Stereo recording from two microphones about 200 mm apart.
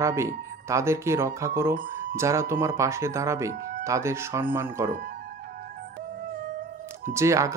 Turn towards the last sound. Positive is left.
turn(degrees=-15)  # may be behind; listen again after turning